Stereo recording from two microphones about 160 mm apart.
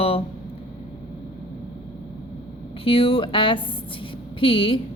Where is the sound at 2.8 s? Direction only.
35° left (ahead or behind).